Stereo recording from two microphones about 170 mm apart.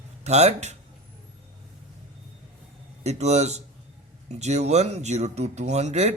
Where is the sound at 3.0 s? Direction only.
40° right (ahead or behind).